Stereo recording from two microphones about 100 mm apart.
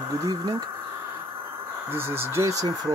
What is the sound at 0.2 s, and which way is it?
Speech, 40° right (ahead or behind).